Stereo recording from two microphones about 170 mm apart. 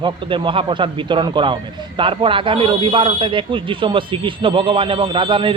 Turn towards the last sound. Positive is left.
turn(degrees=-30)  # may be behind; listen again after turning